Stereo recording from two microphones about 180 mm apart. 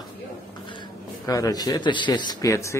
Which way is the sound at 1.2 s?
20° left (ahead or behind).